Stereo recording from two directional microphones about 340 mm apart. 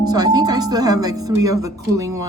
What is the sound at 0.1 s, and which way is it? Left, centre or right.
Speech, centre.